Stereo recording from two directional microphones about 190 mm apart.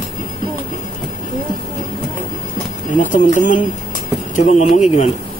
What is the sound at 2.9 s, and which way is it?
Speech, 45° left (ahead or behind).